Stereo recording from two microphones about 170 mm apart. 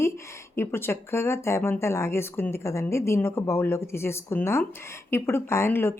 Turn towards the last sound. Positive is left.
turn(degrees=15)  # may be behind; listen again after turning